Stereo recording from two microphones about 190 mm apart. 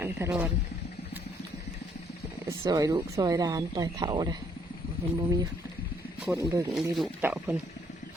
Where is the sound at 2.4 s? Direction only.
15° right (ahead or behind).